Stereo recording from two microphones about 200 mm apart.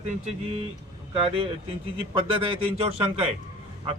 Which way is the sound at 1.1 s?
30° right (ahead or behind).